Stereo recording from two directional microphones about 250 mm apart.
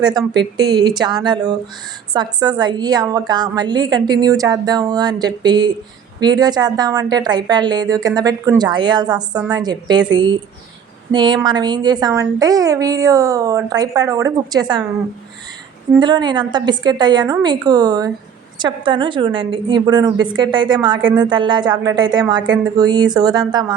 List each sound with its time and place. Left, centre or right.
0.0 s a woman's voice: centre
11.1 s a woman's voice: centre
16.0 s a woman's voice: centre